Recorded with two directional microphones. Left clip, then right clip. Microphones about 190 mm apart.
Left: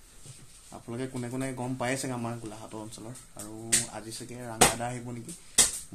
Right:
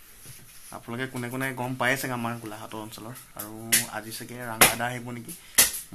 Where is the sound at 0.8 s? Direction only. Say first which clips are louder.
Right 3 dB; 5° right (ahead or behind).